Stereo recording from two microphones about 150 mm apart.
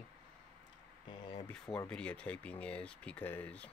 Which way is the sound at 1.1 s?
30° left (ahead or behind).